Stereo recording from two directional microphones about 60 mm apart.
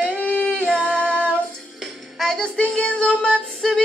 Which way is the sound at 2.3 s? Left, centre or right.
Centre.